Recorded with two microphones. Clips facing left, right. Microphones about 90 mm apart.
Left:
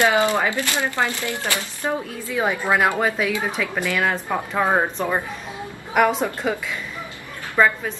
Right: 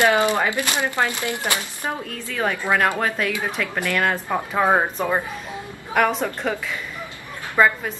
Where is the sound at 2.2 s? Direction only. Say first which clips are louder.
Left 1 dB; 15° left (ahead or behind); by 5.2 s 5° right (ahead or behind).